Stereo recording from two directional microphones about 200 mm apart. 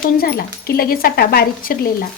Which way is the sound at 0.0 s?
50° left (ahead or behind).